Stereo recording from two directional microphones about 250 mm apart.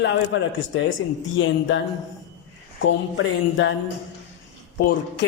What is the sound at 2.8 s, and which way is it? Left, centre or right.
Speech, left.